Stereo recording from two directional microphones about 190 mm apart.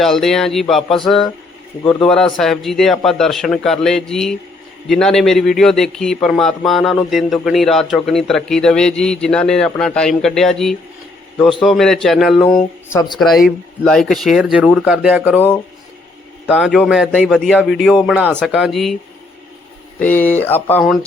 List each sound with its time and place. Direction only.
0.0 s a man's voice: centre (ahead or behind)
12.9 s speech: 20° left (ahead or behind)
13.1 s a man's voice: centre (ahead or behind)
16.5 s a man's voice: 5° right (ahead or behind)
20.0 s speech: 10° left (ahead or behind)